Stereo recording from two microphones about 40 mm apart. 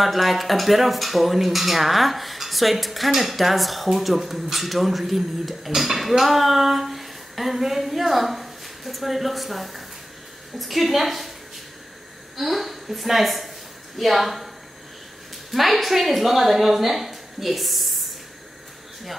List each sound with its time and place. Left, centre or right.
0.0 s speech: centre
12.4 s speech: centre
15.5 s speech: centre